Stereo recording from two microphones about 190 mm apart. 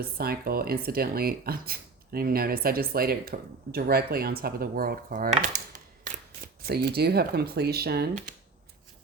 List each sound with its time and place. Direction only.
0.0 s speech: 55° right (ahead or behind)
6.7 s speech: 55° right (ahead or behind)